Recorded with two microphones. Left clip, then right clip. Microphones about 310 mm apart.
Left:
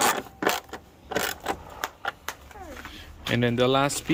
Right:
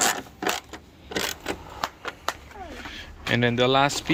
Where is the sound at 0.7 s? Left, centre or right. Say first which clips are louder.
Left 2 dB; centre.